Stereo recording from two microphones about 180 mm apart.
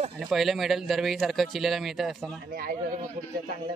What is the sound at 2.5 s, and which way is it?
Speech, 55° right (ahead or behind).